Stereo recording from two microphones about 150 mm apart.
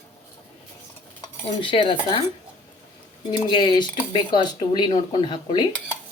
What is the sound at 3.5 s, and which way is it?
Speech, 30° left (ahead or behind).